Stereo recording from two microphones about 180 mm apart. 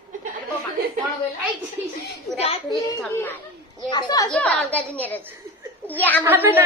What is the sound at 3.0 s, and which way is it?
A woman's voice, 15° left (ahead or behind).